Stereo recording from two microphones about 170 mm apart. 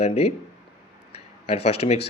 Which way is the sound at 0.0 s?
40° left (ahead or behind).